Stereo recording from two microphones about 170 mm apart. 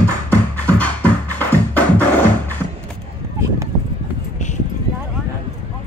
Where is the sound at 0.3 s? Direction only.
10° left (ahead or behind).